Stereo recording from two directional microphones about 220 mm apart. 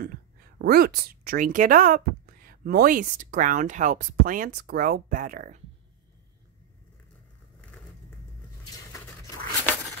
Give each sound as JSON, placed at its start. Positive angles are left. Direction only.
{"t": 0.0, "sound": "speech", "side_deg": -45}